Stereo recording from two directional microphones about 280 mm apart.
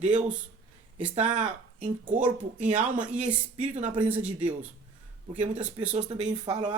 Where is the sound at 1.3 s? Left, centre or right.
Right.